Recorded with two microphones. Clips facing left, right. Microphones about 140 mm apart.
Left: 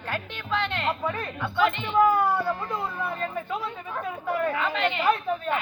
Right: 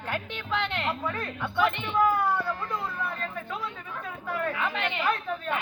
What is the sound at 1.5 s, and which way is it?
Speech, 15° left (ahead or behind).